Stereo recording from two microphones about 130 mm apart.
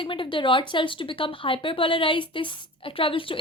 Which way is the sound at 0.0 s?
40° left (ahead or behind).